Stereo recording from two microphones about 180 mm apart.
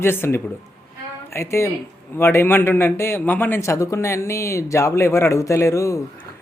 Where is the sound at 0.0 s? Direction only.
15° left (ahead or behind).